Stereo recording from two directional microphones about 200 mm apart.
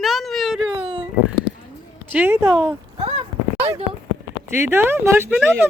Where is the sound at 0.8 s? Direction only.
25° right (ahead or behind).